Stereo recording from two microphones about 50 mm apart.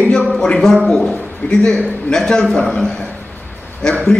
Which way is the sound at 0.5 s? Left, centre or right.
Centre.